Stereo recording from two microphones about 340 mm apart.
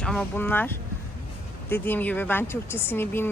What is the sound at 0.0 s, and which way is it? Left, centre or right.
Speech, centre.